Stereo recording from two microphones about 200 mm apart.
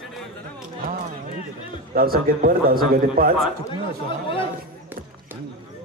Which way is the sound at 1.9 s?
45° right (ahead or behind).